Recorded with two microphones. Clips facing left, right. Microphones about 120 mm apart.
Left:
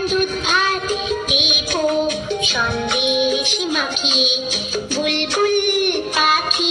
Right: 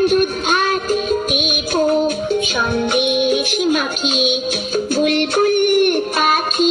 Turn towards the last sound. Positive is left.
turn(degrees=-45)  # may be behind; listen again after turning